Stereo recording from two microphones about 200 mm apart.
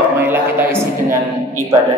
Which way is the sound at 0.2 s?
10° right (ahead or behind).